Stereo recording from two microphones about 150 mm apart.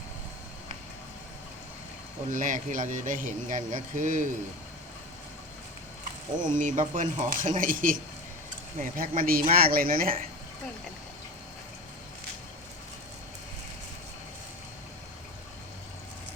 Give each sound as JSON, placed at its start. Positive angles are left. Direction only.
{"t": 2.3, "sound": "speech", "side_deg": -60}
{"t": 6.4, "sound": "speech", "side_deg": -60}